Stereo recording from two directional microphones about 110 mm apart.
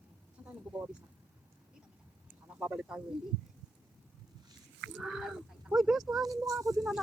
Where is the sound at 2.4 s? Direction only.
10° right (ahead or behind).